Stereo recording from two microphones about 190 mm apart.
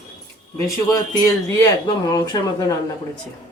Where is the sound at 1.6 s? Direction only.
20° left (ahead or behind).